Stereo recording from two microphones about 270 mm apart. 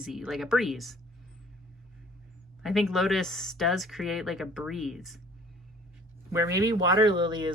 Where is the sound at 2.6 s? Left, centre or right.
Centre.